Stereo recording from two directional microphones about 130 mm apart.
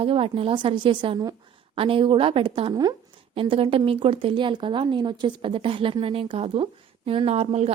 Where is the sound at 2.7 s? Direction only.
30° right (ahead or behind).